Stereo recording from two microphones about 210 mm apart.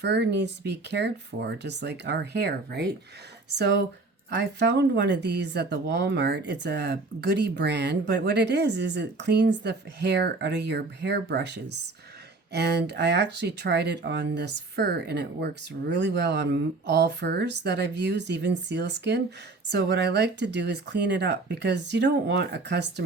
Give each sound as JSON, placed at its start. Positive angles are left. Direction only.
{"t": 0.0, "sound": "speech", "side_deg": -55}